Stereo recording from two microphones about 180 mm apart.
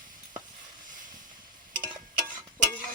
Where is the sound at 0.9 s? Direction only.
45° right (ahead or behind).